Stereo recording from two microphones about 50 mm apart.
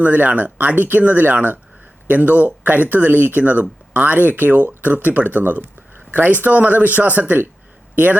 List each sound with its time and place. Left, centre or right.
0.0 s speech: right